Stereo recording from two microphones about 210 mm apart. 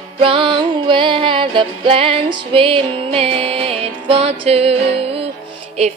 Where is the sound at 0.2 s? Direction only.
25° right (ahead or behind).